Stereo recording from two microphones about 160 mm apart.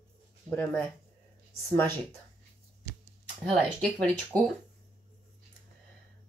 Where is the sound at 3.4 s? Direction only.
5° left (ahead or behind).